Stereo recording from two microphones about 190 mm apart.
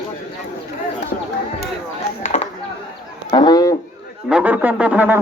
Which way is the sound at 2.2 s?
35° left (ahead or behind).